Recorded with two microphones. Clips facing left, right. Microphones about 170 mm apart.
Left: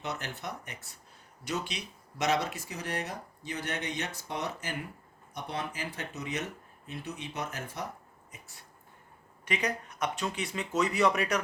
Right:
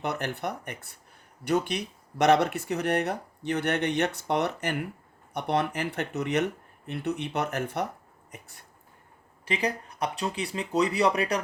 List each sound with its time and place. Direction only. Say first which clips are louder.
0.0 s speech: right 7 dB; 60° right (ahead or behind)
9.4 s speech: right 3 dB; 30° right (ahead or behind)